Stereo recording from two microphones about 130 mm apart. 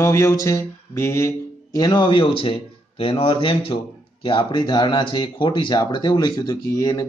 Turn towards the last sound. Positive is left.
turn(degrees=25)  # may be behind; listen again after turning